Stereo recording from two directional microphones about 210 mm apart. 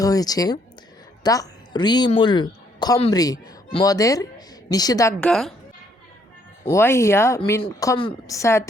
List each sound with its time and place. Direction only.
0.0 s a woman's voice: 15° left (ahead or behind)
5.2 s a woman's voice: centre (ahead or behind)
6.7 s speech: 10° left (ahead or behind)